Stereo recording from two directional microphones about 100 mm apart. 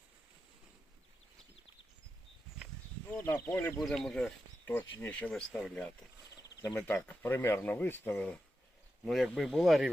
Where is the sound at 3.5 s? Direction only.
20° left (ahead or behind).